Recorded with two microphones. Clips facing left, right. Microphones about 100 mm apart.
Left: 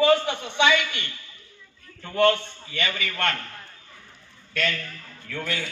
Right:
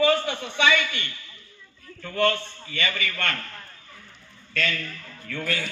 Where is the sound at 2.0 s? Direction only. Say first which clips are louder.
Left 3 dB; 20° left (ahead or behind).